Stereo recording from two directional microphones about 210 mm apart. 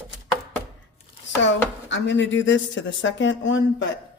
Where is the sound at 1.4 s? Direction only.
60° left (ahead or behind).